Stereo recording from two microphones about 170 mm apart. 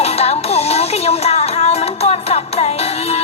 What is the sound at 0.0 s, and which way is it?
Music, 40° left (ahead or behind).